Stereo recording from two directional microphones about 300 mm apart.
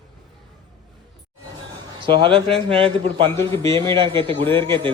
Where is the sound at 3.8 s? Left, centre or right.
Centre.